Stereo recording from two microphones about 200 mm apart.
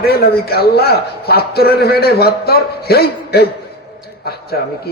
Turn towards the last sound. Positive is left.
turn(degrees=50)  # may be behind; listen again after turning